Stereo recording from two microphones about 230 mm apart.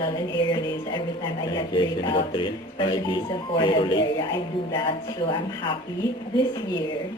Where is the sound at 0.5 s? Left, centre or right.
Centre.